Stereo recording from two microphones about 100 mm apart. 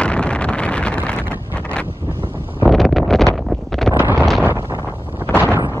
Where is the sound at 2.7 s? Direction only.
Centre (ahead or behind).